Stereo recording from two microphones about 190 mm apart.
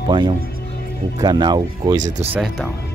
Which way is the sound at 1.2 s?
20° right (ahead or behind).